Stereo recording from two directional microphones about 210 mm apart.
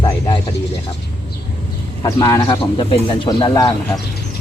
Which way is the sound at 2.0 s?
20° left (ahead or behind).